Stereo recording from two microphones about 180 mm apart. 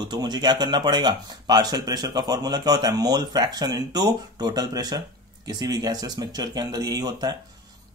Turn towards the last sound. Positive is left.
turn(degrees=-20)  # may be behind; listen again after turning